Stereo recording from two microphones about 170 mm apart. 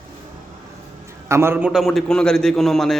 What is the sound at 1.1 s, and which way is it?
A man's voice, 15° right (ahead or behind).